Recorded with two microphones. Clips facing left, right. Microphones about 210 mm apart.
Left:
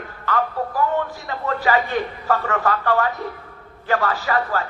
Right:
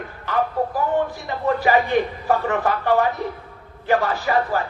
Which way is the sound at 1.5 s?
15° right (ahead or behind).